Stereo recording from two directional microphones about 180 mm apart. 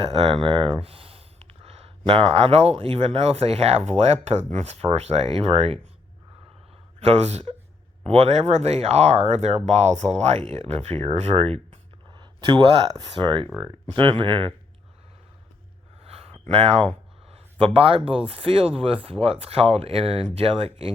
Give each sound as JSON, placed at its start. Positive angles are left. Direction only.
{"t": 0.1, "sound": "speech", "side_deg": -30}
{"t": 7.0, "sound": "speech", "side_deg": -35}
{"t": 16.0, "sound": "a sound", "side_deg": -35}
{"t": 16.5, "sound": "speech", "side_deg": -30}